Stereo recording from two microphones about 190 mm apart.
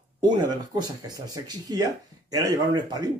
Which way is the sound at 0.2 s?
20° right (ahead or behind).